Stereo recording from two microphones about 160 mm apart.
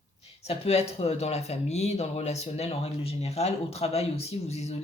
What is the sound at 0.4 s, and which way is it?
Speech, 40° left (ahead or behind).